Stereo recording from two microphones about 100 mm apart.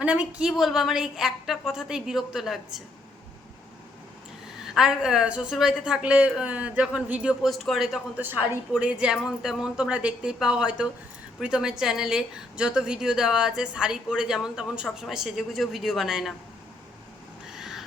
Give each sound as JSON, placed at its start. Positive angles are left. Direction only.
{"t": 0.0, "sound": "a woman's voice", "side_deg": -10}
{"t": 4.6, "sound": "a woman's voice", "side_deg": -5}
{"t": 7.5, "sound": "a woman's voice", "side_deg": 0}
{"t": 8.2, "sound": "a woman's voice", "side_deg": -20}
{"t": 17.5, "sound": "a sound", "side_deg": 0}